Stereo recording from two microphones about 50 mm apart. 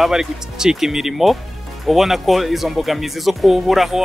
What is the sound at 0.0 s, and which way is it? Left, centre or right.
Speech, centre.